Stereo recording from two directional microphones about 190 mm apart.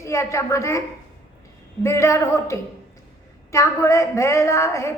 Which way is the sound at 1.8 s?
15° left (ahead or behind).